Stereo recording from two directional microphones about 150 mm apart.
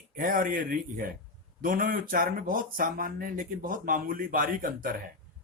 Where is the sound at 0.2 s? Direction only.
65° right (ahead or behind).